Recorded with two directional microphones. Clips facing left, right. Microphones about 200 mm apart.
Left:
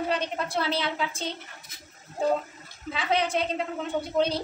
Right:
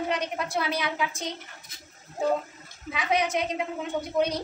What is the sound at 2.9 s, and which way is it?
A woman's voice, 30° left (ahead or behind).